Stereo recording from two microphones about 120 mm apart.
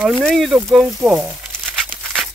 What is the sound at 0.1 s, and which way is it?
Speech, 5° left (ahead or behind).